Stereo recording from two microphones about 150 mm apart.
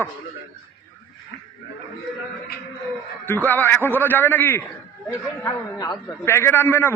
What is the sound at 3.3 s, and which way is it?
A man's voice, 10° left (ahead or behind).